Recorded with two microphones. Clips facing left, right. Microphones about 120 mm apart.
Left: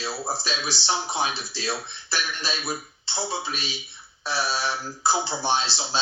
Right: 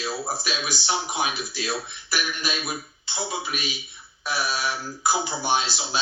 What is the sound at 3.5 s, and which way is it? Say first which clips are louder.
Speech: right 2 dB; 30° left (ahead or behind).